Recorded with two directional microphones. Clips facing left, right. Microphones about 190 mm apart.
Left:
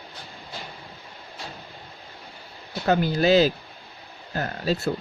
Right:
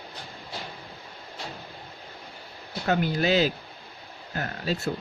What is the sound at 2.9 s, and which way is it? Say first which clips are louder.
Speech: left 4 dB; 35° left (ahead or behind).